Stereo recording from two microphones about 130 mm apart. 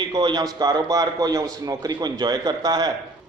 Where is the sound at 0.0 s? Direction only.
35° right (ahead or behind).